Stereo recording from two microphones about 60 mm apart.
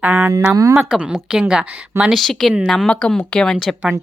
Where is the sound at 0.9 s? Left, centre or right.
Centre.